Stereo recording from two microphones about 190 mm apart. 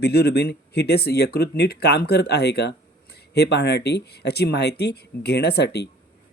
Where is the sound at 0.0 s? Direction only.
55° left (ahead or behind).